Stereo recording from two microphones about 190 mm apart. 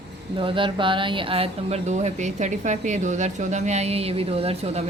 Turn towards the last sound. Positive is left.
turn(degrees=-35)  # may be behind; listen again after turning